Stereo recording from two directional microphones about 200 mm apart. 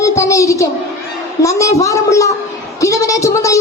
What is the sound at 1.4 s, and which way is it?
A woman's voice, 15° left (ahead or behind).